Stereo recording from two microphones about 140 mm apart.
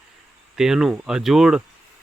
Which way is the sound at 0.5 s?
5° right (ahead or behind).